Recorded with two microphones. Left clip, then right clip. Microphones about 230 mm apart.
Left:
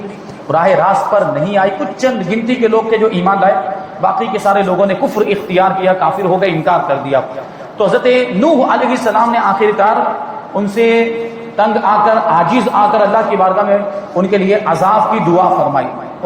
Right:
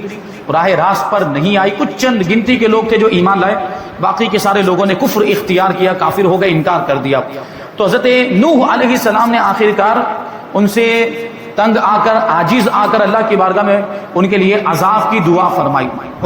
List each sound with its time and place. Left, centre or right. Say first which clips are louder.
0.4 s a man's voice: left 1 dB; right